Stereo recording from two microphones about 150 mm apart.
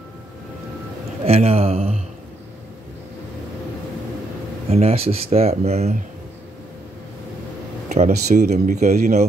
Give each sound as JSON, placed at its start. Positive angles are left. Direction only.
{"t": 1.2, "sound": "speech", "side_deg": -40}
{"t": 4.6, "sound": "speech", "side_deg": -45}
{"t": 7.9, "sound": "speech", "side_deg": -50}